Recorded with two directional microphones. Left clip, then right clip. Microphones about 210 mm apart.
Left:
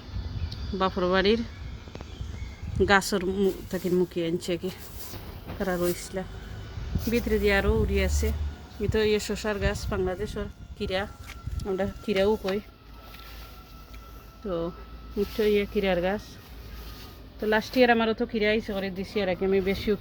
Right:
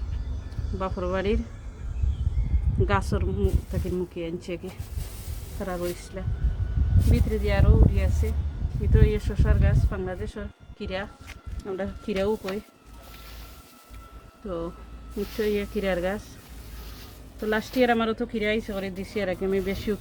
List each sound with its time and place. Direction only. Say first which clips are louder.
0.8 s speech: left 4 dB; 35° left (ahead or behind)
2.8 s speech: left 5 dB; 35° left (ahead or behind)
11.6 s speech: left 2 dB; 15° left (ahead or behind)
14.4 s speech: left 2 dB; 20° left (ahead or behind)
17.4 s speech: left 2 dB; 5° left (ahead or behind)